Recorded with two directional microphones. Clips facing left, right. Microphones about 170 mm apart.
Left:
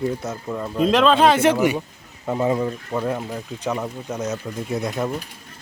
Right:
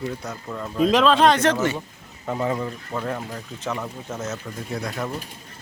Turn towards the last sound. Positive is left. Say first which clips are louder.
# left 5 dB
turn(degrees=20)  # may be behind; listen again after turning